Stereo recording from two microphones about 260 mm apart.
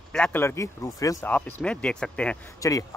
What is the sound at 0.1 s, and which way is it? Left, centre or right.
Speech, centre.